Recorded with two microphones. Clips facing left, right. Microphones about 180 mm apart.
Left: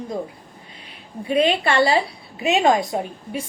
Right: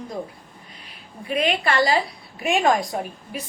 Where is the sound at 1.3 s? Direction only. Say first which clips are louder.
Left 4 dB; 30° left (ahead or behind).